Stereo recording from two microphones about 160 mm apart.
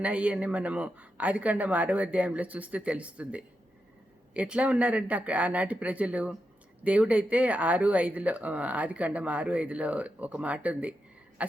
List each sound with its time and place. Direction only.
0.0 s speech: 10° right (ahead or behind)